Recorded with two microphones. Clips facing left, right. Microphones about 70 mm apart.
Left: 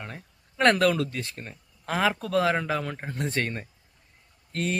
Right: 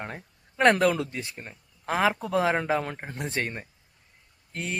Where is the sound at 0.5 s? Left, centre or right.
Centre; by 2.9 s right.